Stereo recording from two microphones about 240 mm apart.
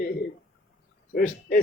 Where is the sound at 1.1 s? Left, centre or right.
Left.